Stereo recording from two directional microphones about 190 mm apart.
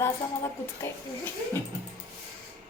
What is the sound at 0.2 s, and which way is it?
Speech, 15° left (ahead or behind).